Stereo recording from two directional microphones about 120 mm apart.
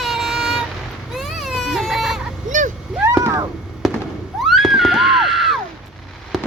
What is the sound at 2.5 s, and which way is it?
Vehicle, 90° right.